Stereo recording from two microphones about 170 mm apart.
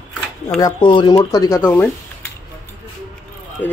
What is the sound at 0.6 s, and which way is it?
Speech, 25° left (ahead or behind).